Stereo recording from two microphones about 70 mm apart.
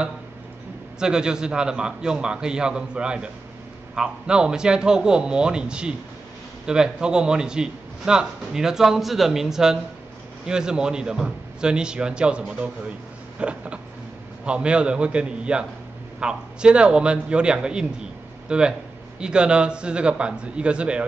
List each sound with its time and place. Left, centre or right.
0.9 s a man's voice: centre